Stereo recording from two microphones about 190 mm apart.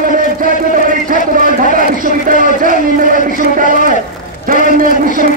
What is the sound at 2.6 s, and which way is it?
A man's voice, 45° right (ahead or behind).